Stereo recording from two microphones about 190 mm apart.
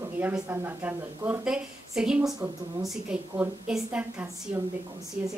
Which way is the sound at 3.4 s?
10° right (ahead or behind).